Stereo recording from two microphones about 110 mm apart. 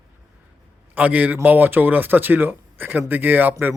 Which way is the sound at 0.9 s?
15° right (ahead or behind).